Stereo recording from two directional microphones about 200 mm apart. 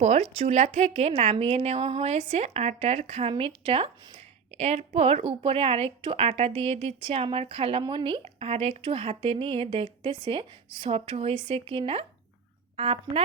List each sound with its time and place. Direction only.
0.0 s a woman's voice: 35° right (ahead or behind)